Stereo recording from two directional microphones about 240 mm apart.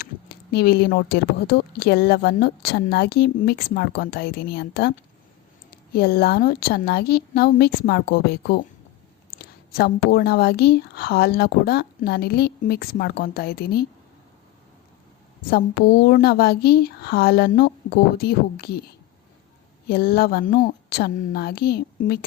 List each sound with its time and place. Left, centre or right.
0.5 s speech: left
15.4 s speech: left
19.9 s speech: left